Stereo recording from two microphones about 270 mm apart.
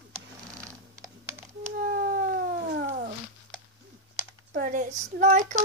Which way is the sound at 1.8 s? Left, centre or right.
Right.